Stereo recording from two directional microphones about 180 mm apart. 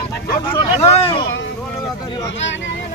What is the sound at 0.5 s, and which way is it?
Speech, 30° left (ahead or behind).